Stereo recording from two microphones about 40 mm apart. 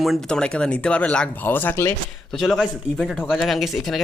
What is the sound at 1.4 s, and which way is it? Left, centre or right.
Speech, left.